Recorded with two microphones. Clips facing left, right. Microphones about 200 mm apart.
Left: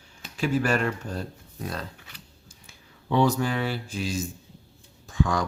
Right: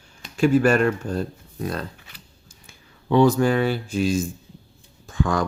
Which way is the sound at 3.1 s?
50° right (ahead or behind).